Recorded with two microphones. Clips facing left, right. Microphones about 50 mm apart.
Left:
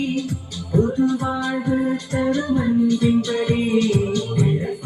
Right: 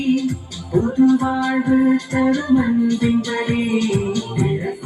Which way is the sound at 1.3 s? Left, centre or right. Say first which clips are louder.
Right 5 dB; centre.